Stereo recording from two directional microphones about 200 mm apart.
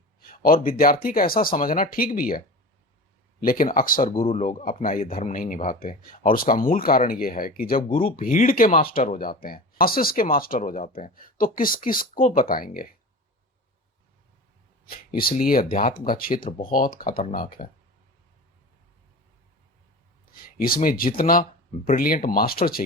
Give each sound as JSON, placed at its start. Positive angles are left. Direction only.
{"t": 0.3, "sound": "speech", "side_deg": 45}
{"t": 3.4, "sound": "speech", "side_deg": 45}
{"t": 7.9, "sound": "speech", "side_deg": 25}
{"t": 8.1, "sound": "speech", "side_deg": 40}
{"t": 14.8, "sound": "speech", "side_deg": 45}
{"t": 20.3, "sound": "speech", "side_deg": 45}